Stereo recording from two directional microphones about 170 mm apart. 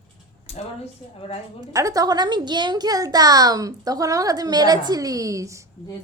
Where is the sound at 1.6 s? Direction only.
20° right (ahead or behind).